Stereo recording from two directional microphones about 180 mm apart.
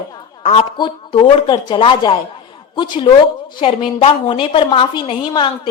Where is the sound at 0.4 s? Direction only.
30° left (ahead or behind).